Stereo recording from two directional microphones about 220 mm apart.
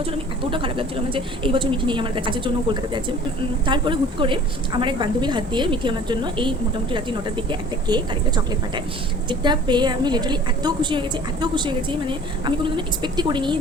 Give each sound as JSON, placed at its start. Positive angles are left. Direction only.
{"t": 0.5, "sound": "a woman's voice", "side_deg": -25}